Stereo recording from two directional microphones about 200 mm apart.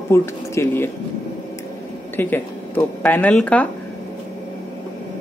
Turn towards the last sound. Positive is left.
turn(degrees=5)  # may be behind; listen again after turning